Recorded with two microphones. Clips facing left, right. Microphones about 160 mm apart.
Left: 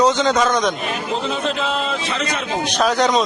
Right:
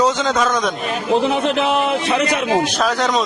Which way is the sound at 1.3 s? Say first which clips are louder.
Right 5 dB; 70° right (ahead or behind).